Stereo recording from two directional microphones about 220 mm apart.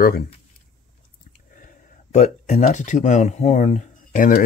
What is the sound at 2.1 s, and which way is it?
Speech, 30° left (ahead or behind).